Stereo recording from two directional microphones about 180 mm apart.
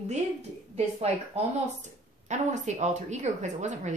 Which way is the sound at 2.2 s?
40° right (ahead or behind).